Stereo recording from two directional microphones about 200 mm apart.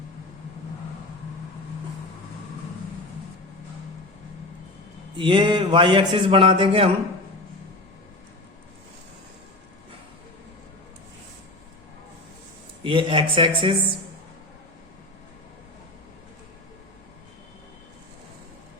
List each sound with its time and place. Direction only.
5.1 s a man's voice: 25° right (ahead or behind)
12.8 s a man's voice: 25° right (ahead or behind)